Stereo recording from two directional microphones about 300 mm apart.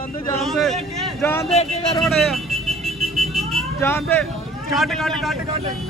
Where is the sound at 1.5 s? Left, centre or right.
Centre.